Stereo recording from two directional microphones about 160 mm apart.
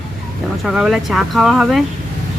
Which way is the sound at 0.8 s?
Centre (ahead or behind).